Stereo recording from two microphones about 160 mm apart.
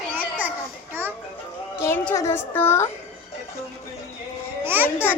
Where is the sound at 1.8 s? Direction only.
15° left (ahead or behind).